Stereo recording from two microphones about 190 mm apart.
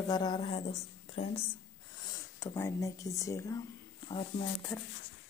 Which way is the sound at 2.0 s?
15° left (ahead or behind).